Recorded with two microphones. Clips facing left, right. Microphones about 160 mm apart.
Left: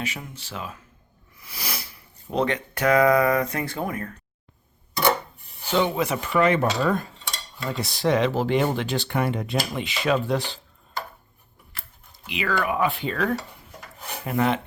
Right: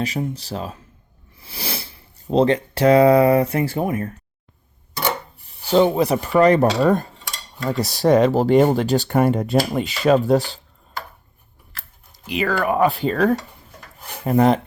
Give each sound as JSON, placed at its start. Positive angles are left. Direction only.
{"t": 0.0, "sound": "speech", "side_deg": -35}
{"t": 5.6, "sound": "speech", "side_deg": -35}
{"t": 12.2, "sound": "speech", "side_deg": -40}